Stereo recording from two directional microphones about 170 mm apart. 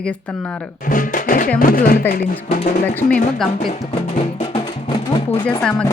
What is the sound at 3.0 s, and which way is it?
Speech, 10° left (ahead or behind).